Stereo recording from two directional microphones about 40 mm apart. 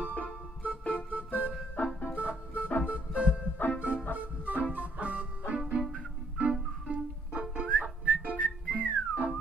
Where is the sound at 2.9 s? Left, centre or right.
Right.